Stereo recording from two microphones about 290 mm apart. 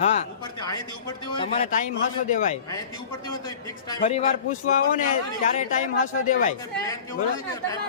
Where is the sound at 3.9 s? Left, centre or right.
Left.